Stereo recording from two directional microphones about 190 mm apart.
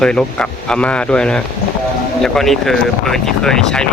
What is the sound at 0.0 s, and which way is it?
Speech, 5° left (ahead or behind).